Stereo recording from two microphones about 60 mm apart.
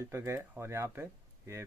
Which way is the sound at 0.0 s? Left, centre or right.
Right.